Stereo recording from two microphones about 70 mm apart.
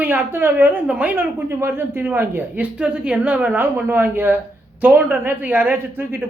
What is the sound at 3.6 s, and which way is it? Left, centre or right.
Speech, right.